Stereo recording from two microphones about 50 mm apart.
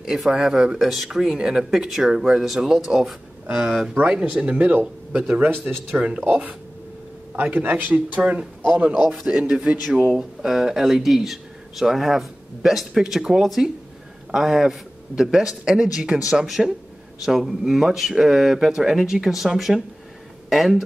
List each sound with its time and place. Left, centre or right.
0.0 s speech: centre
3.4 s speech: right
3.9 s speech: right
7.3 s a man's voice: right
10.1 s speech: centre